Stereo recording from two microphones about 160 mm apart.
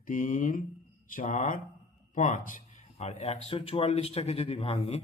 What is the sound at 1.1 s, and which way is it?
A man's voice, 50° left (ahead or behind).